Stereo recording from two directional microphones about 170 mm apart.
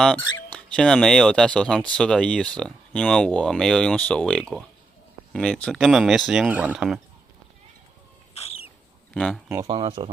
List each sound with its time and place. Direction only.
0.0 s speech: 5° left (ahead or behind)
8.3 s a sound: 40° left (ahead or behind)
9.1 s speech: 5° left (ahead or behind)
9.6 s speech: 30° right (ahead or behind)